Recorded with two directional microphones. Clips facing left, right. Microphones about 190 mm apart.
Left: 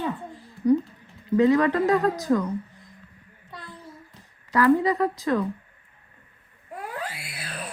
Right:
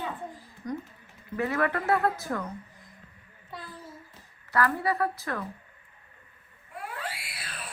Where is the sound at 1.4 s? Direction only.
20° left (ahead or behind).